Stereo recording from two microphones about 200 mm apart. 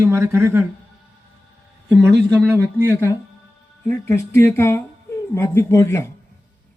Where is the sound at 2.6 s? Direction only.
10° left (ahead or behind).